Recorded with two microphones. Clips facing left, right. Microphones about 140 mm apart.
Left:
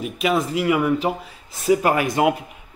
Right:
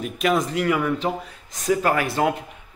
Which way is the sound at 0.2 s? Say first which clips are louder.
Even; 5° left (ahead or behind).